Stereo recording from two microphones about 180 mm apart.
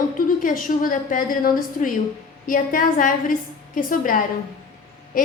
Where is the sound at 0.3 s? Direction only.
50° left (ahead or behind).